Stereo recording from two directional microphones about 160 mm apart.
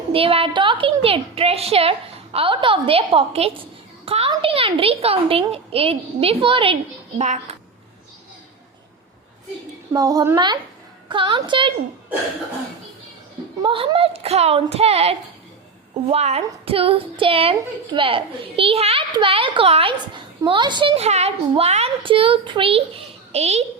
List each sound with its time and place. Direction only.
0.1 s a woman's voice: 35° right (ahead or behind)
7.2 s a child's voice: 45° right (ahead or behind)
9.9 s a child's voice: 25° right (ahead or behind)
13.6 s a woman's voice: 35° right (ahead or behind)